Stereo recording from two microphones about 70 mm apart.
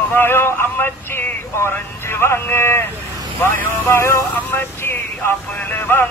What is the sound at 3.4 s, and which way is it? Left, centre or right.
Male singing, left.